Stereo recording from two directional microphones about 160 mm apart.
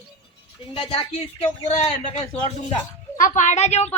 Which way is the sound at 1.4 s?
45° left (ahead or behind).